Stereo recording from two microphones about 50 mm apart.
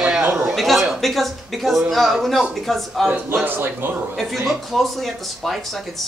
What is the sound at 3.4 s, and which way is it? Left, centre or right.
Speech, right.